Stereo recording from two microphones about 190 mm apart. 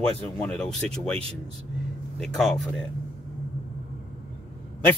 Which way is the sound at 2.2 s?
Centre (ahead or behind).